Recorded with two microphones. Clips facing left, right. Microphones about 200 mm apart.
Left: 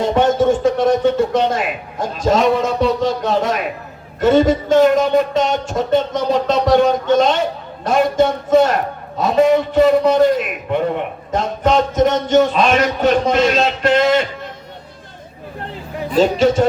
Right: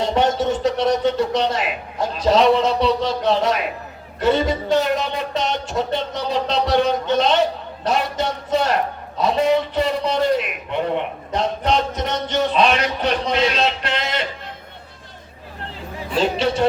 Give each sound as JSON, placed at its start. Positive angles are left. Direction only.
{"t": 0.0, "sound": "speech", "side_deg": 50}
{"t": 7.9, "sound": "a sound", "side_deg": 50}
{"t": 16.0, "sound": "speech", "side_deg": 45}